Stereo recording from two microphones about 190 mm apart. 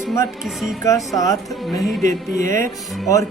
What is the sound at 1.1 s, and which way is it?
Speech, 20° left (ahead or behind).